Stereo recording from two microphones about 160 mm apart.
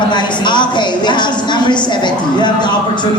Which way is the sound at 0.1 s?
30° left (ahead or behind).